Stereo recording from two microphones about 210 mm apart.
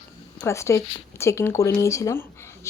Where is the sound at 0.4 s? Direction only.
15° left (ahead or behind).